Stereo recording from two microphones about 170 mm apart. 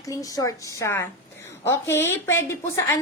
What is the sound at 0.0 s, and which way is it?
A woman's voice, 20° left (ahead or behind).